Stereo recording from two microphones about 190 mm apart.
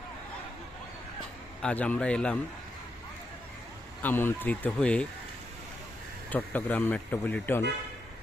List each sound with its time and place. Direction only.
1.6 s speech: 5° left (ahead or behind)
4.0 s speech: 10° left (ahead or behind)
6.3 s speech: 10° left (ahead or behind)